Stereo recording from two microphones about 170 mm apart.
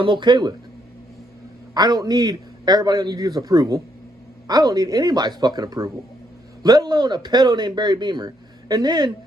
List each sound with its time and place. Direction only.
0.0 s speech: 25° right (ahead or behind)
1.7 s speech: 25° right (ahead or behind)